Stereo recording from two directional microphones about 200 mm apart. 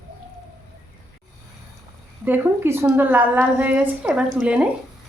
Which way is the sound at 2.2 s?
10° right (ahead or behind).